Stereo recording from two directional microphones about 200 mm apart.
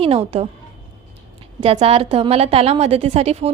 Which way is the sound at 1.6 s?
30° right (ahead or behind).